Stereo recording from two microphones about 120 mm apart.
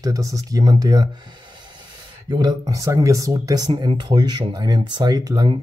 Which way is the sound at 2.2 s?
35° right (ahead or behind).